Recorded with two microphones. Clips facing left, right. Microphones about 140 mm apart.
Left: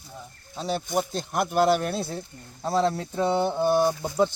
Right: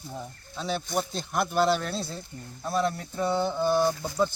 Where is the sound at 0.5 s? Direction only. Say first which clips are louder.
Left 3 dB; 40° left (ahead or behind).